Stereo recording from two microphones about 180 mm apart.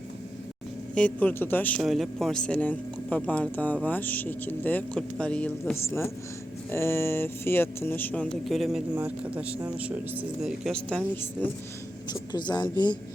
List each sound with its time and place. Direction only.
0.9 s speech: 5° left (ahead or behind)
12.3 s speech: 25° left (ahead or behind)